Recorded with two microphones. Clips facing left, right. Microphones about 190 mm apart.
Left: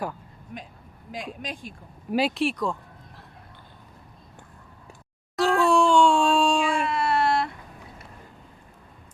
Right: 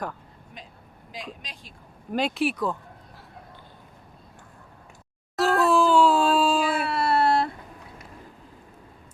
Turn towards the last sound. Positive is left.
turn(degrees=-30)  # may be behind; listen again after turning